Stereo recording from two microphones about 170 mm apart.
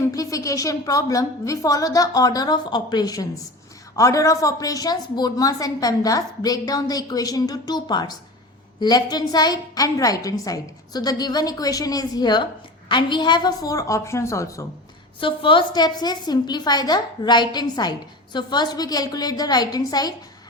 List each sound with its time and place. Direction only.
0.1 s a woman's voice: 20° left (ahead or behind)
15.2 s a woman's voice: 30° left (ahead or behind)